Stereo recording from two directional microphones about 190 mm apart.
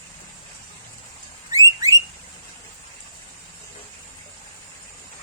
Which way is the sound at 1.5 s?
20° right (ahead or behind).